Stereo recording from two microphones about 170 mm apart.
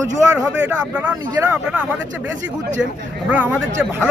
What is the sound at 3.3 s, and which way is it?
Speech, 10° right (ahead or behind).